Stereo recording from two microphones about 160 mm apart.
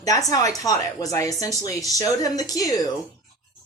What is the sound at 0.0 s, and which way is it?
Speech, 20° left (ahead or behind).